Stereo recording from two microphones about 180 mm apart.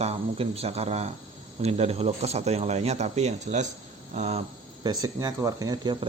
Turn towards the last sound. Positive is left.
turn(degrees=-25)  # may be behind; listen again after turning